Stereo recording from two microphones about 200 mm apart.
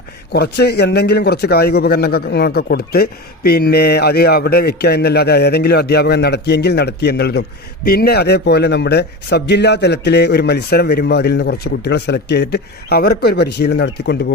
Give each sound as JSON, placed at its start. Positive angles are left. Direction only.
{"t": 0.3, "sound": "a man's voice", "side_deg": 55}